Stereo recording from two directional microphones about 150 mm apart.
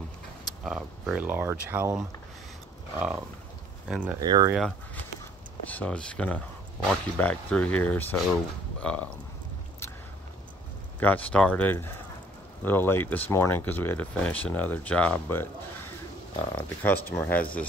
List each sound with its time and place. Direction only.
0.7 s speech: 5° right (ahead or behind)
3.0 s speech: 10° right (ahead or behind)
4.2 s speech: 25° right (ahead or behind)
5.7 s speech: 10° left (ahead or behind)
11.0 s speech: 10° left (ahead or behind)
16.5 s speech: 10° left (ahead or behind)